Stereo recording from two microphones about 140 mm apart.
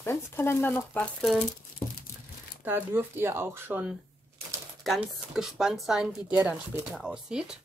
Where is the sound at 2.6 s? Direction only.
15° right (ahead or behind).